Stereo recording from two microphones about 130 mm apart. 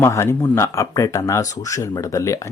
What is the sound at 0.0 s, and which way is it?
Speech, 20° left (ahead or behind).